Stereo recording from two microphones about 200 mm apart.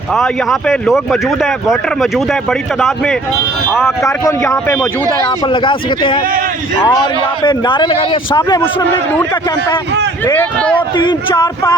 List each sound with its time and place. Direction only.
0.1 s speech: centre (ahead or behind)
4.0 s speech: 15° left (ahead or behind)
5.5 s speech: 25° left (ahead or behind)
10.2 s speech: 10° left (ahead or behind)
10.9 s speech: 20° left (ahead or behind)